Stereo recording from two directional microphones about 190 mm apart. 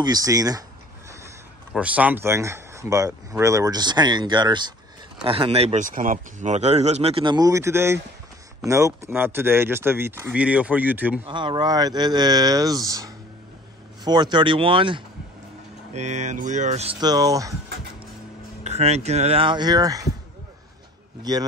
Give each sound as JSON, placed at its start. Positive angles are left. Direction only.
{"t": 0.0, "sound": "speech", "side_deg": -20}
{"t": 1.7, "sound": "speech", "side_deg": -5}
{"t": 11.2, "sound": "speech", "side_deg": -25}
{"t": 15.9, "sound": "speech", "side_deg": -35}
{"t": 18.6, "sound": "speech", "side_deg": -35}
{"t": 21.2, "sound": "speech", "side_deg": -20}